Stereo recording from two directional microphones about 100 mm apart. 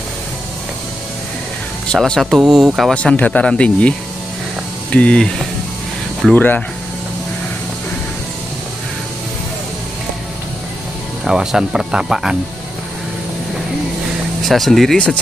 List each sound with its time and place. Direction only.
1.9 s speech: 5° left (ahead or behind)
2.9 s speech: 10° left (ahead or behind)
4.9 s speech: 10° left (ahead or behind)
6.3 s speech: 20° left (ahead or behind)
11.2 s speech: 5° right (ahead or behind)
14.4 s speech: centre (ahead or behind)